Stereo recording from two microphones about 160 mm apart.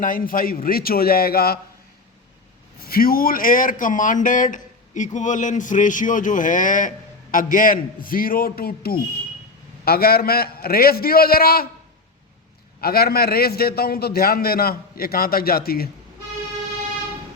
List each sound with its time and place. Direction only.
0.0 s a man's voice: 60° left (ahead or behind)
2.8 s a man's voice: 65° left (ahead or behind)
12.8 s a man's voice: 75° left (ahead or behind)